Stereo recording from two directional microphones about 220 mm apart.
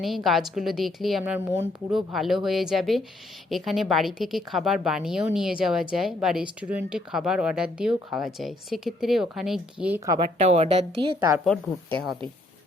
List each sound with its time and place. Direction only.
0.3 s speech: centre (ahead or behind)
10.4 s a woman's voice: 30° right (ahead or behind)
11.4 s speech: centre (ahead or behind)